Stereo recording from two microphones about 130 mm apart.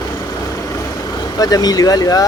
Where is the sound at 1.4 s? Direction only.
30° left (ahead or behind).